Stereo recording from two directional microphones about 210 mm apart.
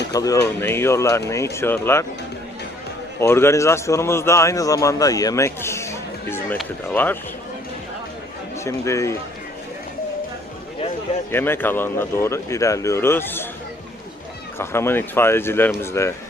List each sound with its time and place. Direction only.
0.1 s a man's voice: 15° left (ahead or behind)
3.2 s a man's voice: 10° left (ahead or behind)
8.6 s a man's voice: 15° left (ahead or behind)
11.3 s a man's voice: 10° left (ahead or behind)
14.6 s a man's voice: 10° left (ahead or behind)